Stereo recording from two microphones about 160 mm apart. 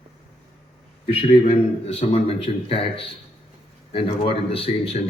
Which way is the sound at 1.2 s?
40° left (ahead or behind).